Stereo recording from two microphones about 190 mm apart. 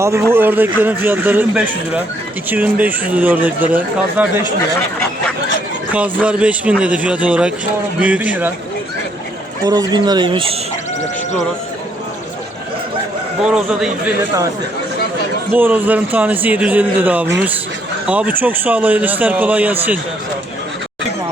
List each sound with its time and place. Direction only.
0.0 s speech: 15° right (ahead or behind)
6.2 s speech: 5° right (ahead or behind)
9.6 s speech: 20° right (ahead or behind)
13.4 s a man's voice: 5° right (ahead or behind)
15.5 s speech: 10° right (ahead or behind)